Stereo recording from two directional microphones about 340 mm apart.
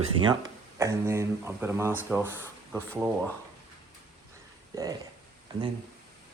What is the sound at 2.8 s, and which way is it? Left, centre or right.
Speech, centre.